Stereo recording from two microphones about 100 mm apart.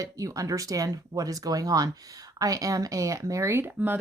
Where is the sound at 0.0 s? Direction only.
35° right (ahead or behind).